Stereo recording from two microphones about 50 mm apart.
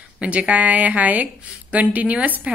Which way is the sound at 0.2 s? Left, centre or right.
Right.